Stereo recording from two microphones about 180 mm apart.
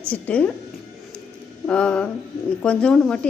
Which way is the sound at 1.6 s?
5° left (ahead or behind).